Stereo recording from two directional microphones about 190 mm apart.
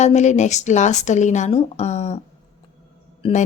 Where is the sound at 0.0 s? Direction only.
35° left (ahead or behind).